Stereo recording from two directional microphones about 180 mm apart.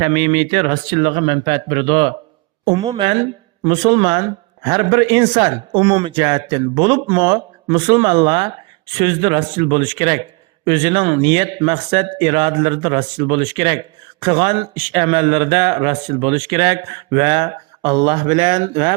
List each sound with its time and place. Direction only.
0.0 s a man's voice: 25° right (ahead or behind)